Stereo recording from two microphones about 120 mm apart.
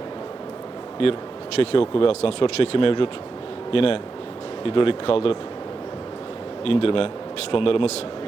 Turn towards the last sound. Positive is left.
turn(degrees=50)  # may be behind; listen again after turning